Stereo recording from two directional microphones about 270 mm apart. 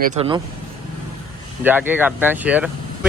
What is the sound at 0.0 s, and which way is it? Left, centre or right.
Speech, right.